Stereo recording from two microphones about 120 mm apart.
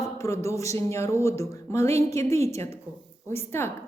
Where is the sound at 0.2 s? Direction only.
25° left (ahead or behind).